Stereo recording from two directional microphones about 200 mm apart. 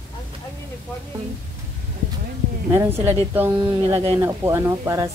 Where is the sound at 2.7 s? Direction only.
15° right (ahead or behind).